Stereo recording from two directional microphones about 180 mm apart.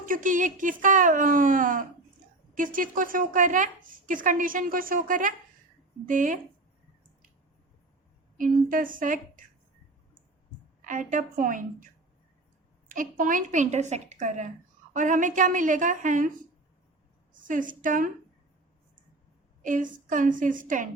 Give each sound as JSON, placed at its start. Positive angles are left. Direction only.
{"t": 0.0, "sound": "a woman's voice", "side_deg": -45}
{"t": 8.4, "sound": "a woman's voice", "side_deg": -50}
{"t": 10.8, "sound": "a woman's voice", "side_deg": -45}
{"t": 12.9, "sound": "a woman's voice", "side_deg": -50}
{"t": 17.3, "sound": "a woman's voice", "side_deg": -45}
{"t": 19.6, "sound": "a woman's voice", "side_deg": -45}